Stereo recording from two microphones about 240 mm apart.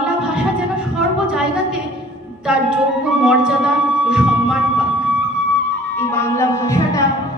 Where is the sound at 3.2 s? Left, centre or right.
Centre.